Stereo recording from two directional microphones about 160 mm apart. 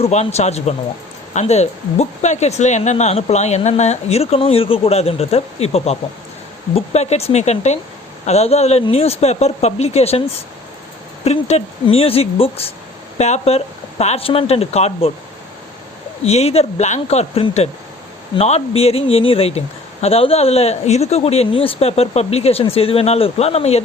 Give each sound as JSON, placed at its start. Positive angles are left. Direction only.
{"t": 0.0, "sound": "speech", "side_deg": 45}
{"t": 16.2, "sound": "speech", "side_deg": 40}